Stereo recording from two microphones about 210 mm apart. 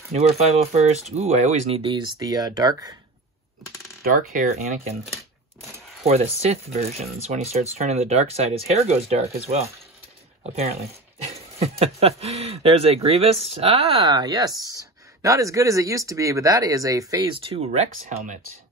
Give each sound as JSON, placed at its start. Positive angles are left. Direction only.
{"t": 0.1, "sound": "speech", "side_deg": -30}
{"t": 4.0, "sound": "speech", "side_deg": -40}
{"t": 6.0, "sound": "speech", "side_deg": -30}
{"t": 17.6, "sound": "speech", "side_deg": -35}